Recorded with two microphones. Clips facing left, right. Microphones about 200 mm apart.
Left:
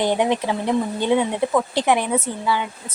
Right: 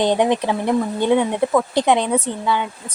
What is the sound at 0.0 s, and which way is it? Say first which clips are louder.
Speech: right 3 dB; 20° right (ahead or behind).